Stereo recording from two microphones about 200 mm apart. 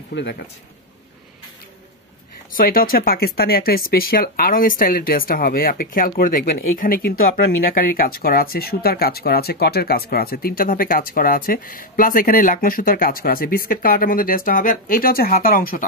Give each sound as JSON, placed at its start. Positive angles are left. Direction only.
{"t": 0.1, "sound": "speech", "side_deg": 60}
{"t": 2.5, "sound": "speech", "side_deg": 45}